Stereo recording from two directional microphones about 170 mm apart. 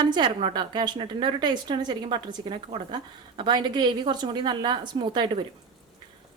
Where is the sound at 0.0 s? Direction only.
30° right (ahead or behind).